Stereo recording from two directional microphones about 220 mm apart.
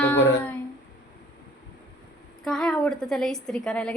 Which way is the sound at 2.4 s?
5° left (ahead or behind).